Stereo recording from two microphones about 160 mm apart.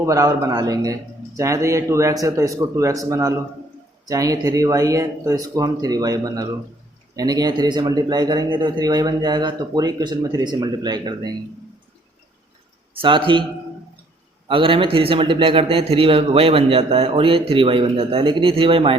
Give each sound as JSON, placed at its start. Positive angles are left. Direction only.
{"t": 0.0, "sound": "a man's voice", "side_deg": -20}
{"t": 12.9, "sound": "a man's voice", "side_deg": -30}
{"t": 14.4, "sound": "a man's voice", "side_deg": -35}